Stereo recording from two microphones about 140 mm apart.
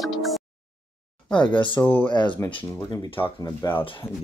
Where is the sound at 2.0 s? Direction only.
35° left (ahead or behind).